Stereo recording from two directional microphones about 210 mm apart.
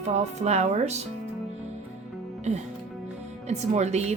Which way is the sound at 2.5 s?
30° right (ahead or behind).